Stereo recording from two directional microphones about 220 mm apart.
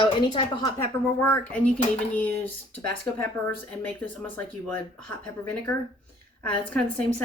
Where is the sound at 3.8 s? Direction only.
5° left (ahead or behind).